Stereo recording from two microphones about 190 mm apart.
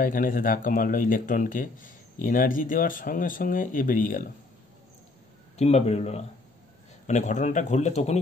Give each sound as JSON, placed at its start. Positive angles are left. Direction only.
{"t": 0.0, "sound": "speech", "side_deg": 45}
{"t": 5.6, "sound": "speech", "side_deg": 35}